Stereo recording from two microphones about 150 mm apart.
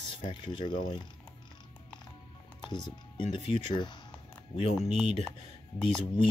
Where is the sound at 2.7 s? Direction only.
30° left (ahead or behind).